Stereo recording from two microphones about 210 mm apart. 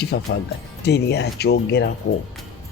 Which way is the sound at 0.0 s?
50° left (ahead or behind).